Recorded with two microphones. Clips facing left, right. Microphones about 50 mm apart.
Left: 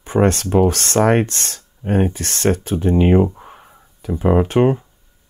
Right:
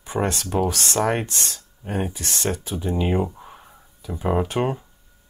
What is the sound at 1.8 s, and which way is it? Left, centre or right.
Speech, left.